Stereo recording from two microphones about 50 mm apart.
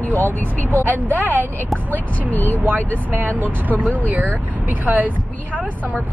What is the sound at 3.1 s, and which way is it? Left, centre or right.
Speech, right.